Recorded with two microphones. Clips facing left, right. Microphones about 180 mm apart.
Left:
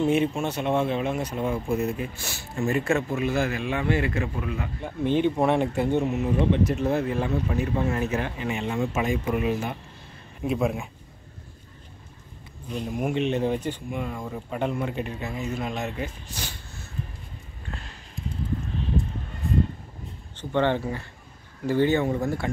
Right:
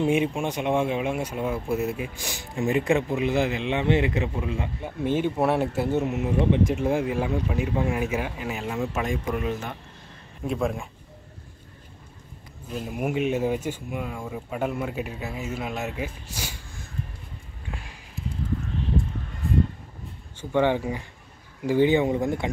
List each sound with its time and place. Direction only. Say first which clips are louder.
0.0 s speech: even; 10° right (ahead or behind)
4.8 s speech: left 2 dB; 5° right (ahead or behind)
12.6 s speech: left 1 dB; 5° right (ahead or behind)
17.6 s a sound: even; 10° right (ahead or behind)
20.3 s speech: right 1 dB; 10° right (ahead or behind)